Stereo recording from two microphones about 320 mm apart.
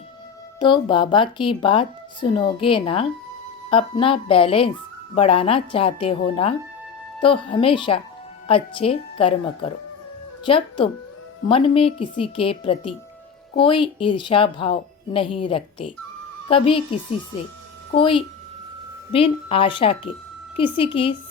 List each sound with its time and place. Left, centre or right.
0.6 s speech: centre